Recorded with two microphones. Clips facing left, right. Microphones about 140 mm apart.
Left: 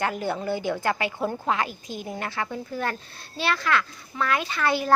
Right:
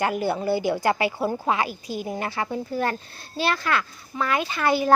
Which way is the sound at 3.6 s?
5° right (ahead or behind).